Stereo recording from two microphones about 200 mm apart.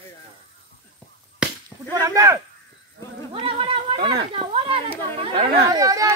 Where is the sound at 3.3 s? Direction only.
25° right (ahead or behind).